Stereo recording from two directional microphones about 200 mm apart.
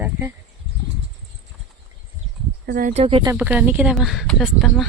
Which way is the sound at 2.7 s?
45° right (ahead or behind).